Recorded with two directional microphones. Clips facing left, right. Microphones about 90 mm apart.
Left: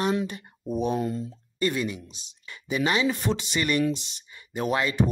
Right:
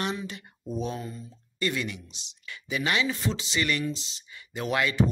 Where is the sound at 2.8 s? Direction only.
30° left (ahead or behind).